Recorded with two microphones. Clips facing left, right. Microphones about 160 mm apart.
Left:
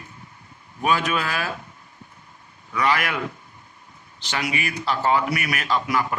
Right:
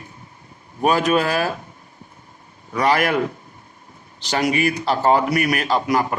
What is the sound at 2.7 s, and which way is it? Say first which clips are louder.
A man's voice: right 5 dB; 40° right (ahead or behind).